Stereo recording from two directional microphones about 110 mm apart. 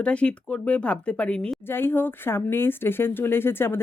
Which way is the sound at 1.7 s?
20° left (ahead or behind).